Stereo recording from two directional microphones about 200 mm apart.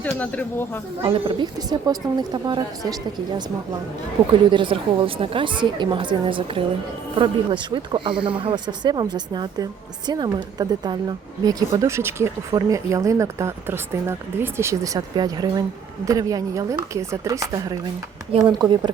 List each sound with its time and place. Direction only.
0.0 s speech: 10° left (ahead or behind)
1.0 s a woman's voice: 25° right (ahead or behind)
4.4 s a woman's voice: 25° right (ahead or behind)